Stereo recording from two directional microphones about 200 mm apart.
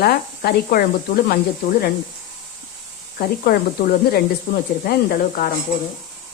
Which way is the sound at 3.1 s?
45° left (ahead or behind).